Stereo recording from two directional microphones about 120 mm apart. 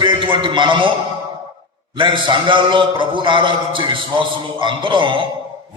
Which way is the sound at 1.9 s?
40° right (ahead or behind).